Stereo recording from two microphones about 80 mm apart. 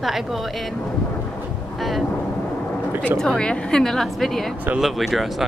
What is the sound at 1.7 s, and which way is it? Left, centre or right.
Speech, centre.